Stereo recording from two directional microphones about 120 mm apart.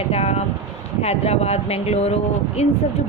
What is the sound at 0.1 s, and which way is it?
A woman's voice, 60° left (ahead or behind).